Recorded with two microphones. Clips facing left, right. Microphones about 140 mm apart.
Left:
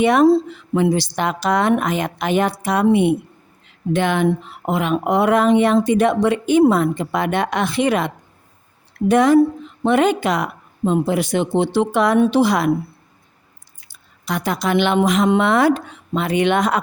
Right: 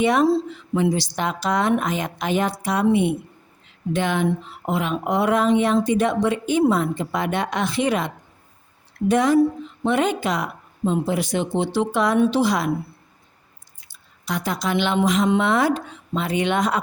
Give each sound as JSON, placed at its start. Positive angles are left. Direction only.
{"t": 0.0, "sound": "speech", "side_deg": 65}
{"t": 13.8, "sound": "speech", "side_deg": 60}